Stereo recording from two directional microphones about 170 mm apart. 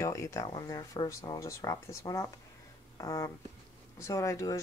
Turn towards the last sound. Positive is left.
turn(degrees=20)  # may be behind; listen again after turning